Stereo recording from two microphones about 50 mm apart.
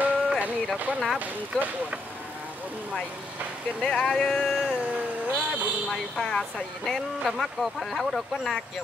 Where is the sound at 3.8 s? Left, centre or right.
Centre.